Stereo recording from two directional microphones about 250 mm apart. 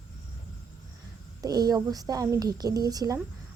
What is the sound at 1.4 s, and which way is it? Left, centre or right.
Speech, centre.